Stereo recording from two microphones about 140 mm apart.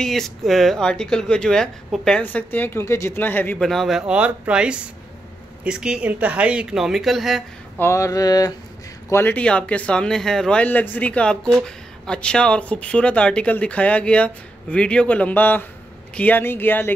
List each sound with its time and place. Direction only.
0.0 s speech: centre (ahead or behind)
7.7 s a sound: 20° left (ahead or behind)
9.1 s speech: 10° left (ahead or behind)